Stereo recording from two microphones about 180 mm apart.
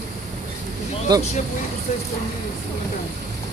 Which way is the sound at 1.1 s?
20° right (ahead or behind).